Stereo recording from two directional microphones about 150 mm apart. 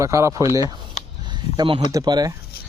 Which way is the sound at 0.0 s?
20° right (ahead or behind).